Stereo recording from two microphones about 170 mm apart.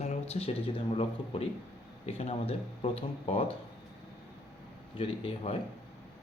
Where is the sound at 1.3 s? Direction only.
35° left (ahead or behind).